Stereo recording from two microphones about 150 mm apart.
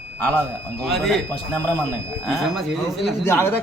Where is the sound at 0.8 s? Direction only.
Centre (ahead or behind).